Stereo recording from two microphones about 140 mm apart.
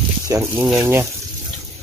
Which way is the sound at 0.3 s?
20° right (ahead or behind).